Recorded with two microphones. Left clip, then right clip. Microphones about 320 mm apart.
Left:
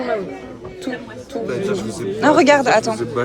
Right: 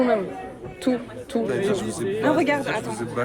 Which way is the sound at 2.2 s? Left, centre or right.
Centre.